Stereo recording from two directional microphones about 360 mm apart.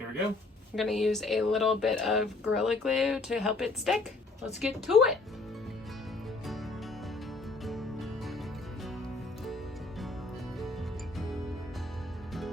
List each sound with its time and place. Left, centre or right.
0.8 s speech: centre
7.6 s music: centre